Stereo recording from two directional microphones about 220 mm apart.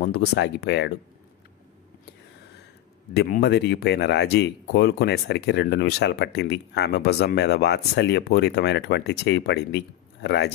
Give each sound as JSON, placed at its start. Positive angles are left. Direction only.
{"t": 0.0, "sound": "speech", "side_deg": 45}
{"t": 3.2, "sound": "speech", "side_deg": 50}